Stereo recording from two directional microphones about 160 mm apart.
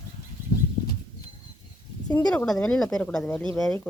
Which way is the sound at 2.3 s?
5° left (ahead or behind).